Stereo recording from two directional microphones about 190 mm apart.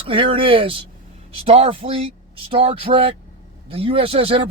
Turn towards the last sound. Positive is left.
turn(degrees=-30)  # may be behind; listen again after turning